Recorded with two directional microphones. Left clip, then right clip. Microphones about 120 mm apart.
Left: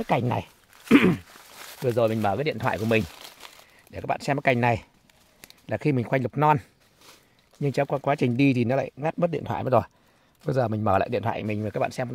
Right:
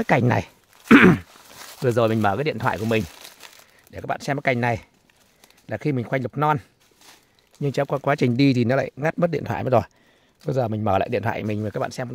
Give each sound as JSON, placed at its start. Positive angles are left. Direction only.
{"t": 0.0, "sound": "speech", "side_deg": -80}
{"t": 1.9, "sound": "speech", "side_deg": -60}
{"t": 2.2, "sound": "speech", "side_deg": -35}
{"t": 3.3, "sound": "crumpling", "side_deg": -15}
{"t": 5.7, "sound": "speech", "side_deg": -10}
{"t": 7.6, "sound": "speech", "side_deg": -20}
{"t": 8.0, "sound": "speech", "side_deg": -35}
{"t": 10.4, "sound": "speech", "side_deg": -20}